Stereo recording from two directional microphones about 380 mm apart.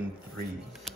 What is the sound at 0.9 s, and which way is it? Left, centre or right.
Music, centre.